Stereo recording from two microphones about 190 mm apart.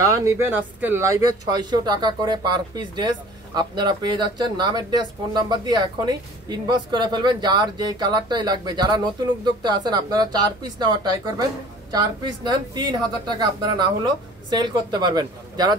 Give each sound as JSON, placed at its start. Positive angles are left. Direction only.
{"t": 0.0, "sound": "speech", "side_deg": -15}